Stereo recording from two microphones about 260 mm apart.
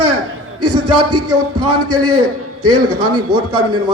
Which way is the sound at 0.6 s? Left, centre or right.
Right.